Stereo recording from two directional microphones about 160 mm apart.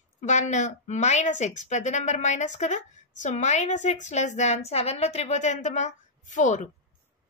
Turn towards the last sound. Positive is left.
turn(degrees=50)  # may be behind; listen again after turning